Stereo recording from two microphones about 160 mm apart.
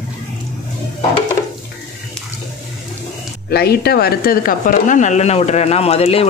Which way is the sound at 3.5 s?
75° left (ahead or behind).